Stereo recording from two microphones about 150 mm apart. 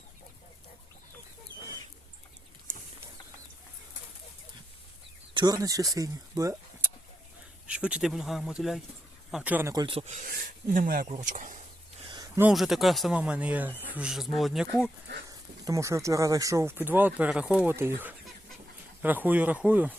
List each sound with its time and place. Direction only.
5.3 s speech: 30° right (ahead or behind)
7.7 s speech: 5° right (ahead or behind)
9.7 s speech: 35° right (ahead or behind)
10.0 s speech: 50° right (ahead or behind)
10.2 s speech: 70° right (ahead or behind)
11.2 s speech: 60° right (ahead or behind)
12.0 s a sound: 30° right (ahead or behind)
12.4 s speech: 5° right (ahead or behind)
15.3 s speech: 20° right (ahead or behind)